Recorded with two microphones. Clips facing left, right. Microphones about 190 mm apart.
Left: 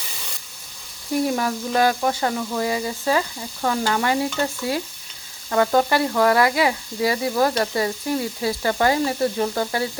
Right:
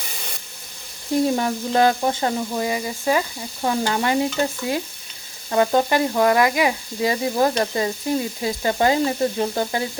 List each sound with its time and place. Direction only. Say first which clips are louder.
1.4 s speech: right 2 dB; 25° right (ahead or behind)